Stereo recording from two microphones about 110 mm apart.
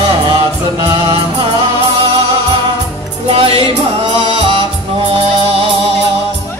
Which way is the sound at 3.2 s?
60° right (ahead or behind).